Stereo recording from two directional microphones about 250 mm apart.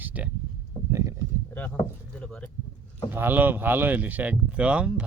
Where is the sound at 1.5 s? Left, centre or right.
Centre.